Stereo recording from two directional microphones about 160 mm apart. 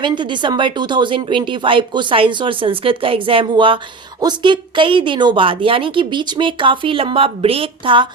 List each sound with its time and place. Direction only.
0.0 s a woman's voice: 30° right (ahead or behind)